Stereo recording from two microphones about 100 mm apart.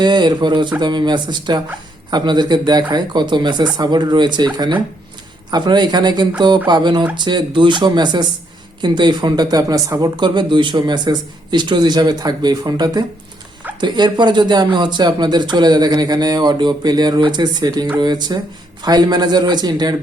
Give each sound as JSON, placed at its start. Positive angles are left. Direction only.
{"t": 0.0, "sound": "speech", "side_deg": -45}
{"t": 10.0, "sound": "speech", "side_deg": -50}